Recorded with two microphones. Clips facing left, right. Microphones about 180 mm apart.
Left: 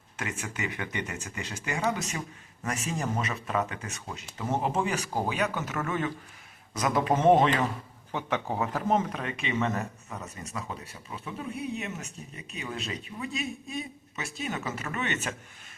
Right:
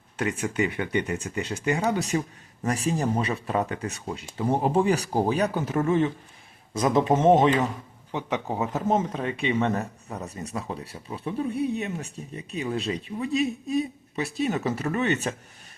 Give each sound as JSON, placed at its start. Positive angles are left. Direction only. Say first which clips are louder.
{"t": 0.2, "sound": "speech", "louder": "right 9 dB", "side_deg": -35}